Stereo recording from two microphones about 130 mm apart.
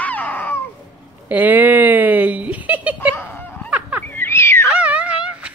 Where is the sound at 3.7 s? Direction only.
10° right (ahead or behind).